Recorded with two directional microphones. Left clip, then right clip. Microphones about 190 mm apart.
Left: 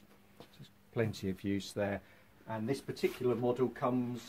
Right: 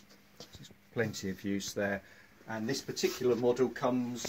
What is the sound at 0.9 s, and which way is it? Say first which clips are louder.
Speech: right 1 dB; 50° left (ahead or behind).